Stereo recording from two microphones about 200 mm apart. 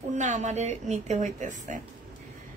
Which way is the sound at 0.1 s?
35° right (ahead or behind).